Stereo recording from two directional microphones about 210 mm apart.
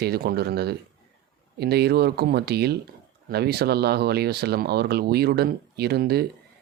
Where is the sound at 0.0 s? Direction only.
50° right (ahead or behind).